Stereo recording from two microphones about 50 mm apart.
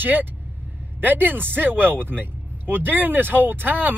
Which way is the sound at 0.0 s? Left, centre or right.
Right.